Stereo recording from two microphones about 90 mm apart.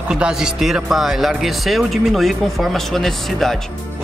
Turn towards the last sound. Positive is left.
turn(degrees=0)  # may be behind; listen again after turning